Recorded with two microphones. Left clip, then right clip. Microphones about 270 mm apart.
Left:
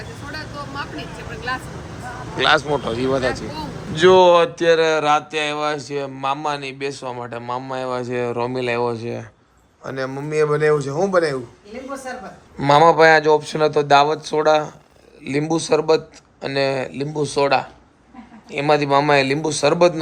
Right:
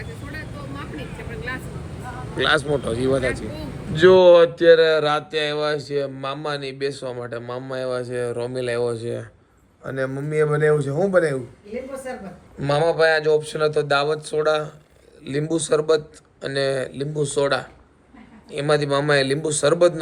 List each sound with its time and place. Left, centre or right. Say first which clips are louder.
2.4 s speech: left 3 dB; centre
12.5 s speech: left 7 dB; left